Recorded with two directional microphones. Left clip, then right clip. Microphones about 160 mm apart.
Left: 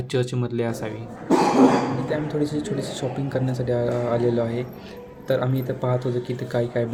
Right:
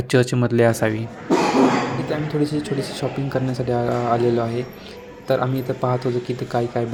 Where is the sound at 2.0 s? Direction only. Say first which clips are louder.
Right 2 dB; 15° right (ahead or behind).